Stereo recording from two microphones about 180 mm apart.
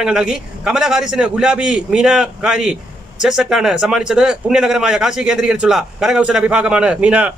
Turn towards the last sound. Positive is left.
turn(degrees=-5)  # may be behind; listen again after turning